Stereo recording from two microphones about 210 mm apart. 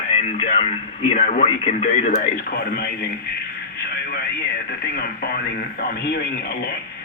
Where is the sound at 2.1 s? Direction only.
45° left (ahead or behind).